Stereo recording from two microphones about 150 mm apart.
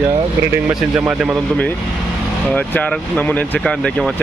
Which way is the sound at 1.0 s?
5° right (ahead or behind).